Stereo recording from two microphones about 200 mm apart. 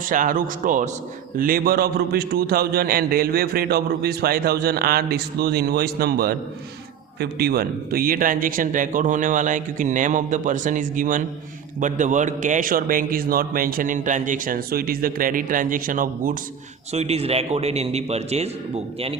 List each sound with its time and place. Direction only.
0.1 s a man's voice: 40° right (ahead or behind)
16.9 s speech: 30° right (ahead or behind)